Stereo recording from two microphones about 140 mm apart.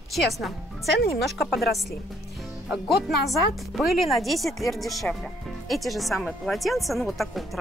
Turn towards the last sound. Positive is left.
turn(degrees=0)  # may be behind; listen again after turning